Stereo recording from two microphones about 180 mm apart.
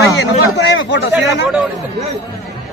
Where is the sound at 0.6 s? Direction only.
80° left.